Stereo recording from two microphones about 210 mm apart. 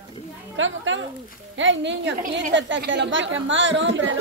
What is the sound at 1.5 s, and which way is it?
Speech, 60° right (ahead or behind).